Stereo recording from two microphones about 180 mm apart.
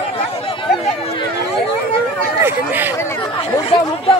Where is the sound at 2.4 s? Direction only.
10° right (ahead or behind).